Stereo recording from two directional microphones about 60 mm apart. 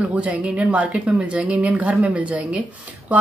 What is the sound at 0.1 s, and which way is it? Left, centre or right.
Speech, right.